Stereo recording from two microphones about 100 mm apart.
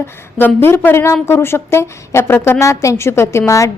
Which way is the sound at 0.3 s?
20° left (ahead or behind).